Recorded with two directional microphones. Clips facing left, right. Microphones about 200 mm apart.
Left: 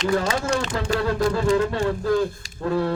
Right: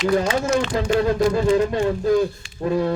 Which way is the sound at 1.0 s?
20° right (ahead or behind).